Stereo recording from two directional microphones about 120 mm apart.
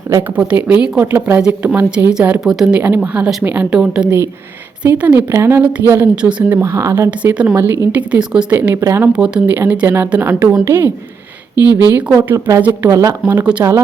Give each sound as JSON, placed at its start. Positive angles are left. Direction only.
{"t": 0.3, "sound": "a woman's voice", "side_deg": -10}
{"t": 7.1, "sound": "a woman's voice", "side_deg": -10}
{"t": 9.1, "sound": "a woman's voice", "side_deg": -10}
{"t": 11.9, "sound": "a woman's voice", "side_deg": -15}
{"t": 12.3, "sound": "speech", "side_deg": -25}
{"t": 13.2, "sound": "a woman's voice", "side_deg": -10}